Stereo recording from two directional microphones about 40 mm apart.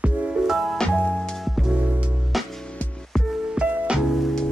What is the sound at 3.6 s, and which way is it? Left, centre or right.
Music, right.